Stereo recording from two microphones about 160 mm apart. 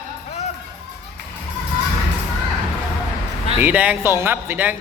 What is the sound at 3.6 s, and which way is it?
Speech, 10° right (ahead or behind).